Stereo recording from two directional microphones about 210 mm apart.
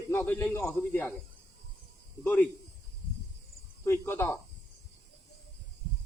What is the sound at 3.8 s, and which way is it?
Speech, 10° left (ahead or behind).